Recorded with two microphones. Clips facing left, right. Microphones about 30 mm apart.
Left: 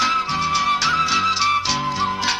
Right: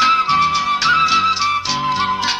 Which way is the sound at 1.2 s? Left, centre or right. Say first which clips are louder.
Right 2 dB; centre.